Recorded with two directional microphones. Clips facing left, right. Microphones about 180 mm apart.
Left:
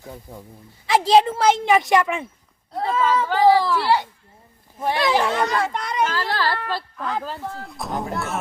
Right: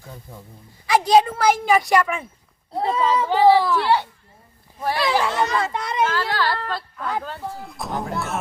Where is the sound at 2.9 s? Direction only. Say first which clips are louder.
Even; 15° right (ahead or behind).